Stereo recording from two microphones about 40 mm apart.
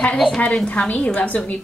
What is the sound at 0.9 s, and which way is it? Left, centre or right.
Speech, left.